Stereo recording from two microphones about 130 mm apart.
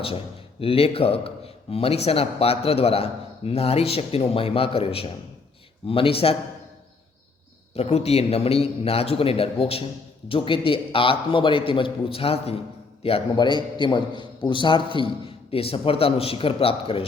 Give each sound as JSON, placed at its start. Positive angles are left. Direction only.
{"t": 0.6, "sound": "a man's voice", "side_deg": 45}
{"t": 7.7, "sound": "a man's voice", "side_deg": 55}
{"t": 13.3, "sound": "a man's voice", "side_deg": 35}